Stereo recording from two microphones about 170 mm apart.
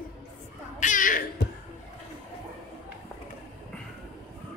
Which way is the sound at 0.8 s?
50° left (ahead or behind).